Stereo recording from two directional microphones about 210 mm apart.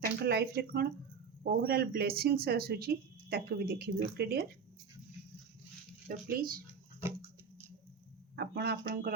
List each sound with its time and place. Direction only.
0.0 s speech: 50° right (ahead or behind)
6.1 s speech: 45° right (ahead or behind)
8.4 s speech: 50° right (ahead or behind)